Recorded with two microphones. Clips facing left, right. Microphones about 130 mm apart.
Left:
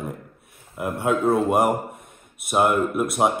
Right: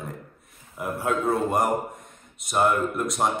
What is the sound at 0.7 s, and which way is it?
Speech, centre (ahead or behind).